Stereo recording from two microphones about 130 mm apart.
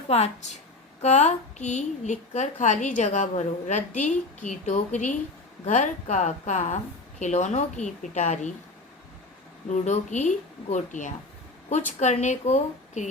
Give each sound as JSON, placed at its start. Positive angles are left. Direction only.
{"t": 0.1, "sound": "a woman's voice", "side_deg": 60}
{"t": 9.6, "sound": "a woman's voice", "side_deg": 65}